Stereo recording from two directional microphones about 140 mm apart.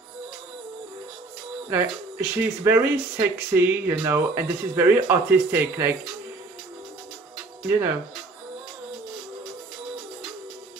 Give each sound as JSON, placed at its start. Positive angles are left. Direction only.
{"t": 1.7, "sound": "speech", "side_deg": -15}